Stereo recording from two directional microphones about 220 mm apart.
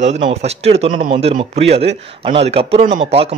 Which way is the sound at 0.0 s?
30° right (ahead or behind).